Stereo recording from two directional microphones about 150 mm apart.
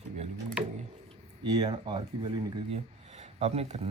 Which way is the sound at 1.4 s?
30° right (ahead or behind).